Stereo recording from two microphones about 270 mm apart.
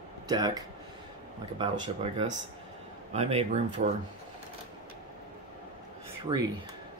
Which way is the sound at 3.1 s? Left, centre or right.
Right.